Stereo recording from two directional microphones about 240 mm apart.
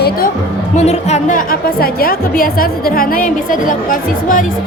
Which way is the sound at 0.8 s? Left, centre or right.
Left.